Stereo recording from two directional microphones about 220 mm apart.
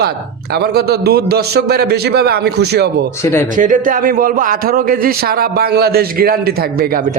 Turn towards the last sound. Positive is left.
turn(degrees=-45)  # may be behind; listen again after turning